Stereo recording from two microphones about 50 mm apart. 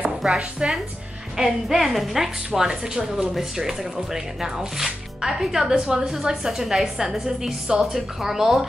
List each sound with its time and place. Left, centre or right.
0.4 s a woman's voice: centre